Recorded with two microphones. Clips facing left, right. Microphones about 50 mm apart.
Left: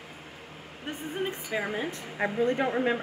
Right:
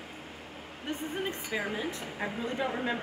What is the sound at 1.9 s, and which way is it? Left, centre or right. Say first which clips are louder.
Speech: left 5 dB; left.